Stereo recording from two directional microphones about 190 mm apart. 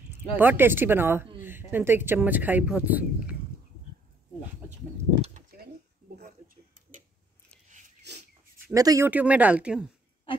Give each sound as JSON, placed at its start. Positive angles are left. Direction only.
{"t": 0.4, "sound": "speech", "side_deg": -10}
{"t": 6.1, "sound": "tick-tock", "side_deg": -50}
{"t": 8.1, "sound": "a sound", "side_deg": -65}
{"t": 8.7, "sound": "speech", "side_deg": -15}